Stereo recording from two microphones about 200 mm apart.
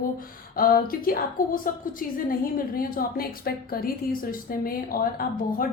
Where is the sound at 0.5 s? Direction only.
45° left (ahead or behind).